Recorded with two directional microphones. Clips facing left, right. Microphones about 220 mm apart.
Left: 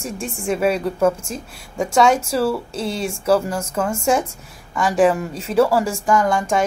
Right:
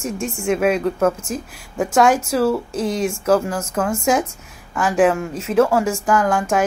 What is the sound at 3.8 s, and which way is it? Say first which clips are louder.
A woman's voice: right 1 dB; centre (ahead or behind).